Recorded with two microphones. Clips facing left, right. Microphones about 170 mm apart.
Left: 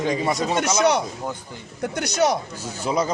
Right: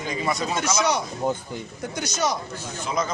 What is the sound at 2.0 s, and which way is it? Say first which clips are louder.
Speech: left 5 dB; 60° left (ahead or behind).